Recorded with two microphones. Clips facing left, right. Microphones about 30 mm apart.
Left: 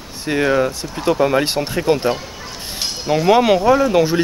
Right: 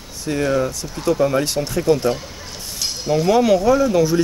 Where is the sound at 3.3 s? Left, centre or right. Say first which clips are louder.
Left 2 dB; left.